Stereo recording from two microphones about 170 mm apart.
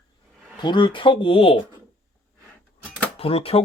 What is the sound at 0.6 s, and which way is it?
Speech, 30° left (ahead or behind).